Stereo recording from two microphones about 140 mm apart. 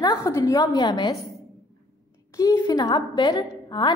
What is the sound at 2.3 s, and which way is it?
A woman's voice, 25° left (ahead or behind).